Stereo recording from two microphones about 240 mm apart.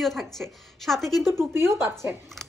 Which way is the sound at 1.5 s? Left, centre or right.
Centre.